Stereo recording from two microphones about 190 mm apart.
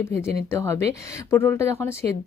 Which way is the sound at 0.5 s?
15° left (ahead or behind).